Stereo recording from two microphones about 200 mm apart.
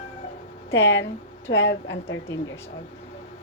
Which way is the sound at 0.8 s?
65° left (ahead or behind).